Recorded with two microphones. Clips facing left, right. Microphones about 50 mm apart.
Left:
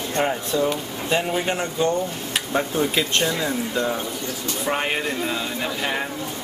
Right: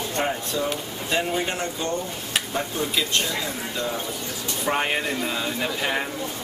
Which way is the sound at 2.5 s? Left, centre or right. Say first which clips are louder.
Left 7 dB; left.